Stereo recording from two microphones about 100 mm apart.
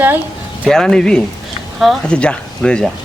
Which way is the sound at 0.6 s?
5° left (ahead or behind).